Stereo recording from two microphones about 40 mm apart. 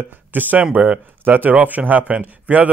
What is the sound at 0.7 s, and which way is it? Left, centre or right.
Speech, right.